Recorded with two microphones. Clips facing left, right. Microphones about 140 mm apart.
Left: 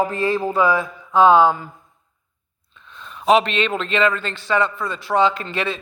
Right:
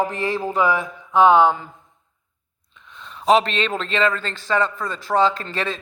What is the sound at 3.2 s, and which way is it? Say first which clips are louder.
A man's voice: left 1 dB; 35° right (ahead or behind).